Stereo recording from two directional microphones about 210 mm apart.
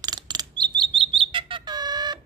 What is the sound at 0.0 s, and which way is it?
Chirp, 20° right (ahead or behind).